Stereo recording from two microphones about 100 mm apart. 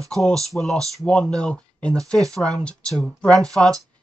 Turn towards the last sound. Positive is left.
turn(degrees=5)  # may be behind; listen again after turning